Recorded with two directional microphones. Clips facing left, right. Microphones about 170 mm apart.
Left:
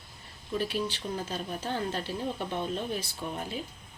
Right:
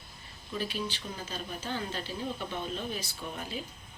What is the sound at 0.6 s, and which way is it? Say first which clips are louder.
A woman's voice: left 3 dB; 65° left (ahead or behind).